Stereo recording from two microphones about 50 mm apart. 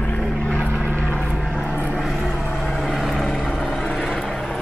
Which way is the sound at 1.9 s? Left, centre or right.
Centre.